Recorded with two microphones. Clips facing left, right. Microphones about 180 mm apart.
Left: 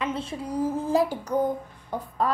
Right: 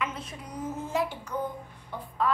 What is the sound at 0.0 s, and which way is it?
A child's voice, 30° left (ahead or behind).